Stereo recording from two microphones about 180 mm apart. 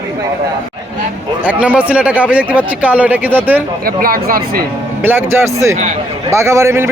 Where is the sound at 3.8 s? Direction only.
55° right (ahead or behind).